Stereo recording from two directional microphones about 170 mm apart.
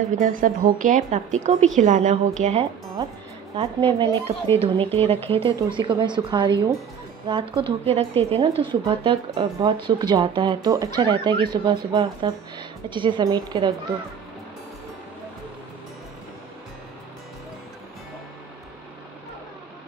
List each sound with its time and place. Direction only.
0.2 s speech: 50° right (ahead or behind)
3.5 s a woman's voice: 35° right (ahead or behind)